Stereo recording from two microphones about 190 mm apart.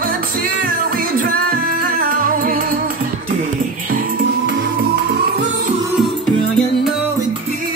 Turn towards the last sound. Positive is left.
turn(degrees=0)  # may be behind; listen again after turning